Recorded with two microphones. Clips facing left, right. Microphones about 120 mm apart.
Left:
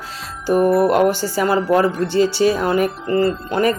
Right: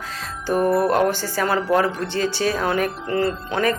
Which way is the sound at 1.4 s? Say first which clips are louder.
Left 3 dB; centre (ahead or behind).